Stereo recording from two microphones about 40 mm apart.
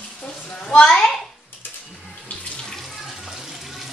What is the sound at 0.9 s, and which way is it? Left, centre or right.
Speech, centre.